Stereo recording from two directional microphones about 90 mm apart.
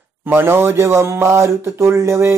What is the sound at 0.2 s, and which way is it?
Speech, 25° right (ahead or behind).